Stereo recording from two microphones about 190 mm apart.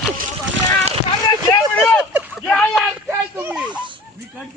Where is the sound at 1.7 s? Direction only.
5° left (ahead or behind).